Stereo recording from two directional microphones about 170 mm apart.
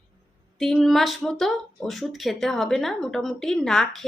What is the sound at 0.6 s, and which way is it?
A woman's voice, centre (ahead or behind).